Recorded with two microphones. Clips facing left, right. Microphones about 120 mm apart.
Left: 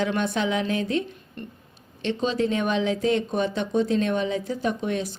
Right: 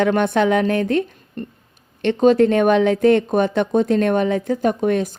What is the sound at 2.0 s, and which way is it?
Speech, 55° right (ahead or behind).